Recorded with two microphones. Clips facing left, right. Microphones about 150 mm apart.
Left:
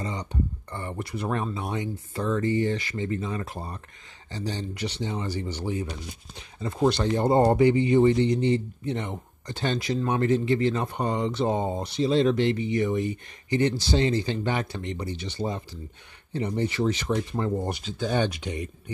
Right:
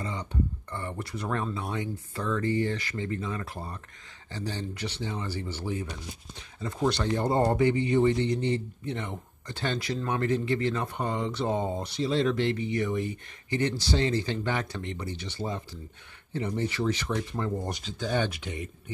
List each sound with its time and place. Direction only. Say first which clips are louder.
0.0 s a man's voice: left 1 dB; 15° left (ahead or behind)
2.1 s speech: left 4 dB; 30° left (ahead or behind)
2.4 s a man's voice: left 3 dB; 20° left (ahead or behind)
11.0 s a man's voice: left 4 dB; 20° left (ahead or behind)
17.6 s a man's voice: left 3 dB; 15° left (ahead or behind)